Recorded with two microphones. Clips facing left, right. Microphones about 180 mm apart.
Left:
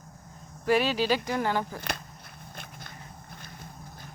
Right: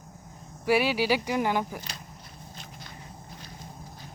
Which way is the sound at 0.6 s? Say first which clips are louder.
Even; 10° right (ahead or behind).